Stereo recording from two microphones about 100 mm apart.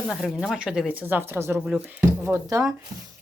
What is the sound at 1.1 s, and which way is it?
Speech, 25° right (ahead or behind).